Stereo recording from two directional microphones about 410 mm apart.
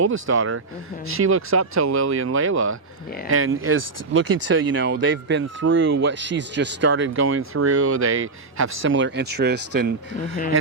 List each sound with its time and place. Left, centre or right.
0.0 s speech: right